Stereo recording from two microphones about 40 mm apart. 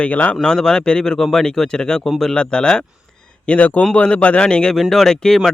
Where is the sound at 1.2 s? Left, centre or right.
Centre.